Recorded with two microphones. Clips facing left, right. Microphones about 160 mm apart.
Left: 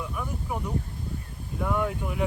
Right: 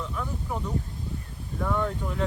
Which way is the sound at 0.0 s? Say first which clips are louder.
Even; 10° left (ahead or behind).